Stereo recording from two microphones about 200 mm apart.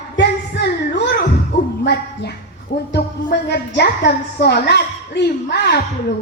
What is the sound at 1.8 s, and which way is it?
A woman's voice, 55° left (ahead or behind).